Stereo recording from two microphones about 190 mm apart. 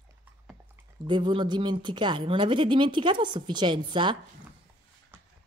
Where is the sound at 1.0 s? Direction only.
25° right (ahead or behind).